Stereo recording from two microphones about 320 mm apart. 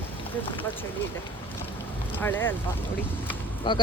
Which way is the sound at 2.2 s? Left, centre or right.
Centre.